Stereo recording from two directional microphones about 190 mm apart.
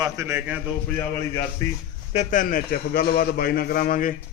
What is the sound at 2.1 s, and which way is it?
A man's voice, 40° left (ahead or behind).